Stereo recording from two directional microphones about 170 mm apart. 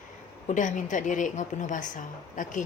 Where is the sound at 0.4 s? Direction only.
45° left (ahead or behind).